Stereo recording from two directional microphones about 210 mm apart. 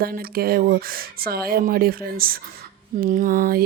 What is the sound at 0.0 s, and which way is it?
Speech, 45° right (ahead or behind).